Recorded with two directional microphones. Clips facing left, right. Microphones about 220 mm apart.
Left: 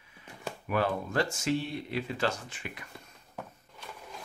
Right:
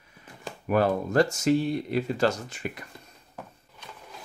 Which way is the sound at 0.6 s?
40° right (ahead or behind).